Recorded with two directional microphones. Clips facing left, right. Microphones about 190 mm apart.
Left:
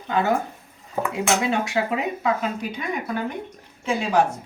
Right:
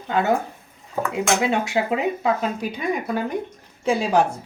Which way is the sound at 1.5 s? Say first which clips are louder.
Right 2 dB; 25° right (ahead or behind).